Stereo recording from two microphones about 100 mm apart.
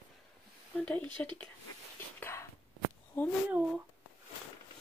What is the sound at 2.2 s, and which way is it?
Whispering, 25° left (ahead or behind).